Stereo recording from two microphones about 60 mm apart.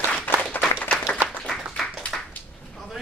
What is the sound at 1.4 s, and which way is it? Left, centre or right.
Clapping, centre.